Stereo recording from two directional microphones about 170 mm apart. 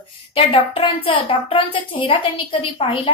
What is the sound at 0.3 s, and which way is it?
A woman's voice, 30° left (ahead or behind).